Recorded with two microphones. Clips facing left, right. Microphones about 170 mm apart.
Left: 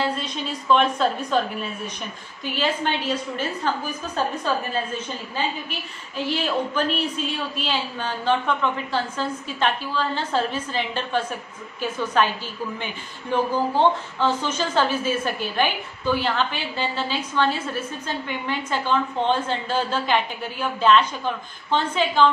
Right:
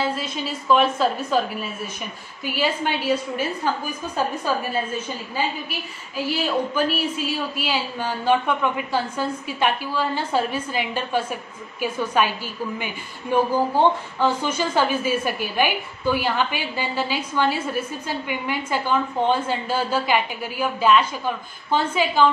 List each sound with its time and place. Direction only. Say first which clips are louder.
0.0 s a woman's voice: right 1 dB; 5° right (ahead or behind)